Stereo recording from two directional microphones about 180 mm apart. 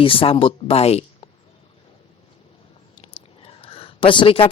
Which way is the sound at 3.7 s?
30° left (ahead or behind).